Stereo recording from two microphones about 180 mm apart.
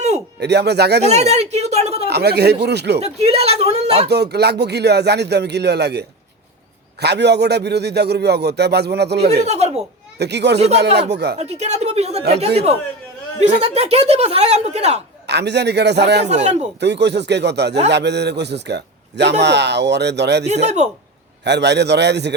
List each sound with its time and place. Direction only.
0.3 s a man's voice: 70° right (ahead or behind)
1.0 s a sound: 35° right (ahead or behind)
2.0 s a man's voice: 65° right (ahead or behind)
3.0 s a sound: 35° right (ahead or behind)
4.1 s a man's voice: 65° right (ahead or behind)
9.4 s speech: 40° right (ahead or behind)
10.2 s a man's voice: 70° right (ahead or behind)
11.3 s speech: 35° right (ahead or behind)
13.4 s speech: 35° right (ahead or behind)
15.3 s a man's voice: 70° right (ahead or behind)
16.3 s speech: 40° right (ahead or behind)
16.8 s a man's voice: 70° right (ahead or behind)
20.7 s speech: 40° right (ahead or behind)
21.4 s a man's voice: 70° right (ahead or behind)